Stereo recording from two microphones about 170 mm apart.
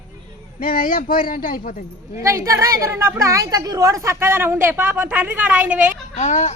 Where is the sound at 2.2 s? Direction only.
20° right (ahead or behind).